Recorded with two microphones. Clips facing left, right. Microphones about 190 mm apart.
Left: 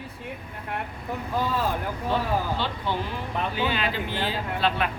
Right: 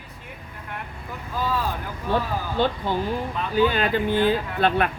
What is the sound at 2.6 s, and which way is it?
Speech, 50° right (ahead or behind).